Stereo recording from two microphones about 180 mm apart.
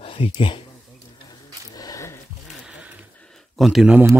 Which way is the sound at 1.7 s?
20° left (ahead or behind).